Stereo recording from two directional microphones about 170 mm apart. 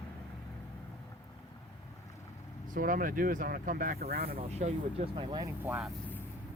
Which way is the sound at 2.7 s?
55° right (ahead or behind).